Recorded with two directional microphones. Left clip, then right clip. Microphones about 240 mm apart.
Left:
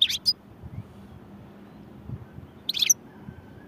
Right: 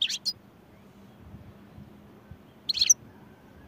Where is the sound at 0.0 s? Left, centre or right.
Centre.